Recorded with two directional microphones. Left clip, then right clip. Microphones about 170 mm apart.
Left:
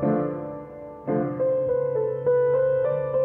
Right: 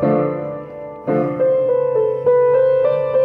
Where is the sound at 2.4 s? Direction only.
20° right (ahead or behind).